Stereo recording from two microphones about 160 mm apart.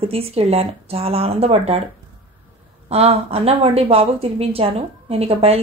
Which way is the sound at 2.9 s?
40° right (ahead or behind).